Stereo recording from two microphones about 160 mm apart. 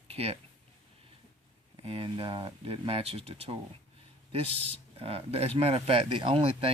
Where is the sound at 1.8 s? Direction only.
35° right (ahead or behind).